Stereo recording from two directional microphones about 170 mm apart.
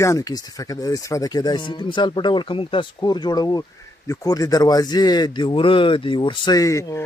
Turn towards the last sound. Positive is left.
turn(degrees=20)  # may be behind; listen again after turning